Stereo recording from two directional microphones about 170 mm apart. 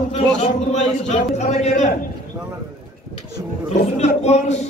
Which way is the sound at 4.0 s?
40° left (ahead or behind).